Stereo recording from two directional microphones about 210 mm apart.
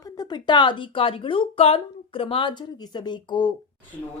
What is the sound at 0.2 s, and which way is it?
Speech, 20° left (ahead or behind).